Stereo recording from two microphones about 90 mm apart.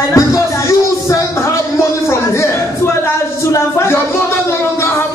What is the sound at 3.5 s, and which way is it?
Music, 35° left (ahead or behind).